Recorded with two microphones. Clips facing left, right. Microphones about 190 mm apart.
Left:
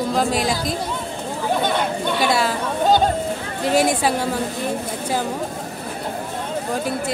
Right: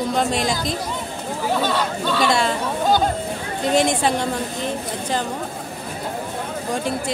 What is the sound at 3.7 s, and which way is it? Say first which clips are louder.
Speech: left 1 dB; 5° left (ahead or behind).